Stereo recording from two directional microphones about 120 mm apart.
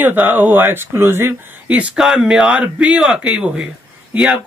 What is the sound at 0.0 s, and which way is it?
Speech, 15° right (ahead or behind).